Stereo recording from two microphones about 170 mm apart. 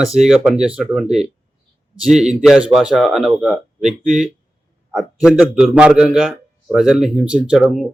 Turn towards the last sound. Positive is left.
turn(degrees=-5)  # may be behind; listen again after turning